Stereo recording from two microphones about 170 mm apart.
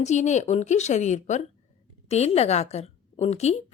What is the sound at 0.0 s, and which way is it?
A woman's voice, 40° left (ahead or behind).